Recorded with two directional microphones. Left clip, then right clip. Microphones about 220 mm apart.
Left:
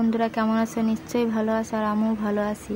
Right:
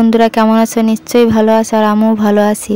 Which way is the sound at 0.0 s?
45° right (ahead or behind).